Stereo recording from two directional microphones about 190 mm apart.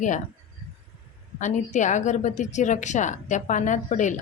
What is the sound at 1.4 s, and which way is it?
A woman's voice, 40° left (ahead or behind).